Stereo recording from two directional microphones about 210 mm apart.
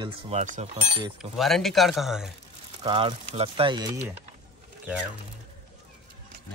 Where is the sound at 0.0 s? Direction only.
30° right (ahead or behind).